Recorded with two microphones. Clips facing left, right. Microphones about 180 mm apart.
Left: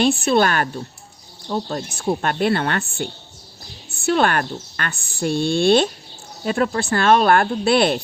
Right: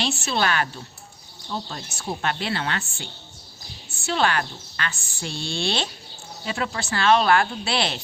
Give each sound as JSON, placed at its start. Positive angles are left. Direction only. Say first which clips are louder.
{"t": 0.0, "sound": "a woman's voice", "louder": "left 8 dB", "side_deg": 55}